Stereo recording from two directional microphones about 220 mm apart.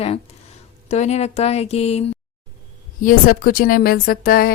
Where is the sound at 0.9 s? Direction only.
30° left (ahead or behind).